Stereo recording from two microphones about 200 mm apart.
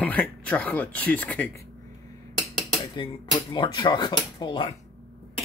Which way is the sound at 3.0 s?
25° left (ahead or behind).